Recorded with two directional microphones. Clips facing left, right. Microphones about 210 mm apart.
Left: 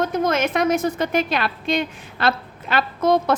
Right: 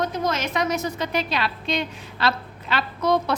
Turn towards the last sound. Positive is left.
turn(degrees=50)  # may be behind; listen again after turning